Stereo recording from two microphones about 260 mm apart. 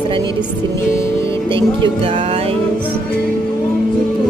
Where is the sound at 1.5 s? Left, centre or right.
Centre.